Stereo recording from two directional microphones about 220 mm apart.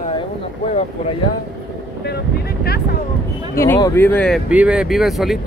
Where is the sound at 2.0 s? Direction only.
45° left (ahead or behind).